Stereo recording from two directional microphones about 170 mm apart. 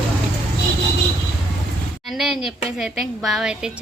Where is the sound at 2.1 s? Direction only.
Centre (ahead or behind).